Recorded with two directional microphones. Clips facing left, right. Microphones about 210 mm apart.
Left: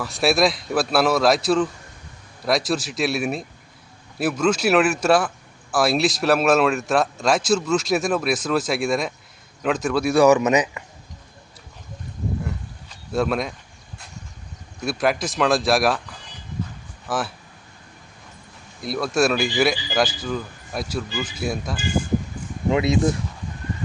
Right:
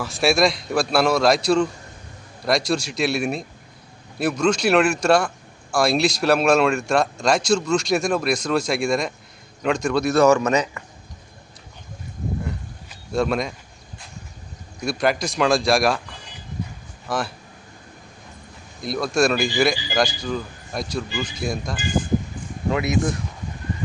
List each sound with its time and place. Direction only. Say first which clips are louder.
0.0 s speech: even; centre (ahead or behind); by 10.8 s 15° left (ahead or behind)
12.5 s a sound: right 1 dB; centre (ahead or behind)
14.8 s speech: even; 5° left (ahead or behind)
17.1 s speech: even; 5° left (ahead or behind)
18.8 s speech: even; 5° left (ahead or behind)
22.7 s speech: left 3 dB; 25° left (ahead or behind)